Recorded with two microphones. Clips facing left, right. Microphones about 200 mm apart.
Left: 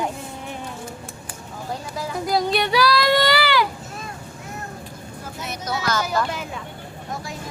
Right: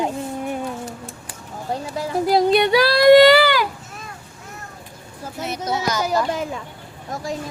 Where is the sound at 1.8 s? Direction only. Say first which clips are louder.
Right 6 dB; 30° right (ahead or behind).